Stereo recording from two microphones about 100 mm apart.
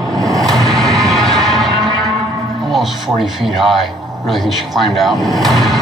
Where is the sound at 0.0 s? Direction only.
35° right (ahead or behind).